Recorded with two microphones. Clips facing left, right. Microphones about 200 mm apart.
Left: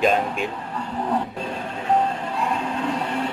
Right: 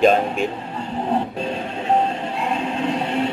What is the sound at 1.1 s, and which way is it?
Train, 25° right (ahead or behind).